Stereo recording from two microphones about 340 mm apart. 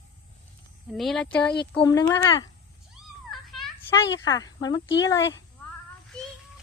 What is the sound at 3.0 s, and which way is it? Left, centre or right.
Cat, centre.